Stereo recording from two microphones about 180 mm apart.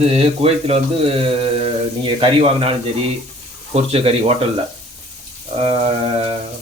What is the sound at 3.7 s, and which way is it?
Speech, 35° right (ahead or behind).